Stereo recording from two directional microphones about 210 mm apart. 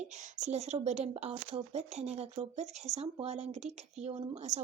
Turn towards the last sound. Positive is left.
turn(degrees=-35)  # may be behind; listen again after turning